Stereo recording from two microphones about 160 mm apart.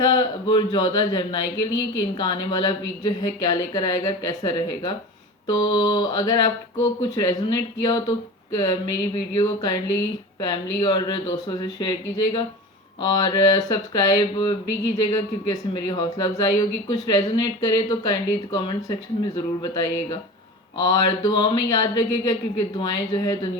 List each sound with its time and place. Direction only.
0.0 s speech: 30° left (ahead or behind)
9.1 s speech: 25° left (ahead or behind)